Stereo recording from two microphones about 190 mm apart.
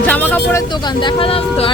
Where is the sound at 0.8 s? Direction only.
25° left (ahead or behind).